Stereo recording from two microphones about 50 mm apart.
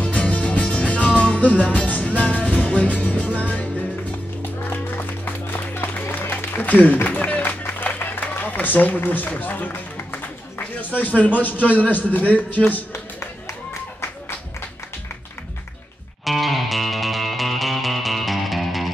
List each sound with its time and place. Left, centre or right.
0.0 s music: left
4.6 s music: left
7.8 s run: left
10.6 s a man's voice: left
16.3 s music: centre